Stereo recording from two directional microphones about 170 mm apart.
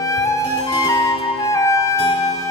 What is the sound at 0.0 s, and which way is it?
Music, 20° left (ahead or behind).